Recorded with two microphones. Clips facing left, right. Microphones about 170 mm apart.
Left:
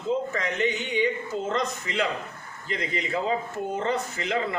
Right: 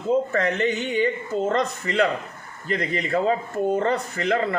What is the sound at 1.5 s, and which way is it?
A man's voice, 50° right (ahead or behind).